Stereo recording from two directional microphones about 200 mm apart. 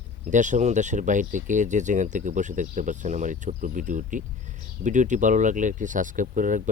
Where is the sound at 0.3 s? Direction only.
40° right (ahead or behind).